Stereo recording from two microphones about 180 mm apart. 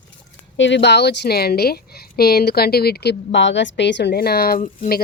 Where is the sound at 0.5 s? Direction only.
85° left.